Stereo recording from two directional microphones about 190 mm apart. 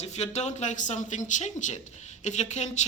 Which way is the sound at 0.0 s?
35° left (ahead or behind).